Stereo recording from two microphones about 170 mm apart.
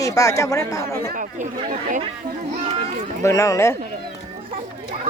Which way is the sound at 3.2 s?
20° left (ahead or behind).